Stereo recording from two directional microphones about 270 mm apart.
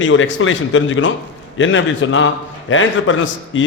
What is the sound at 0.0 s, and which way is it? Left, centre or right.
A man's voice, left.